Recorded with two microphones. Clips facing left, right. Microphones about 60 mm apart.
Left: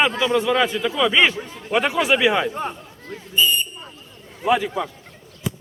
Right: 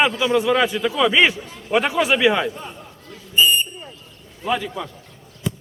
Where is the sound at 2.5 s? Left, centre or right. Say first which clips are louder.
Left 7 dB; left.